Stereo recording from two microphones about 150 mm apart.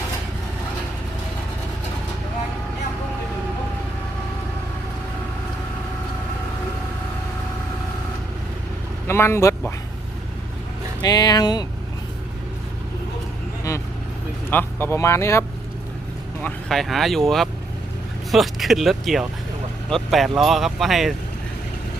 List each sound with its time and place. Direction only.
9.0 s speech: 15° left (ahead or behind)
11.0 s speech: 25° left (ahead or behind)
14.5 s speech: 15° left (ahead or behind)
16.4 s speech: centre (ahead or behind)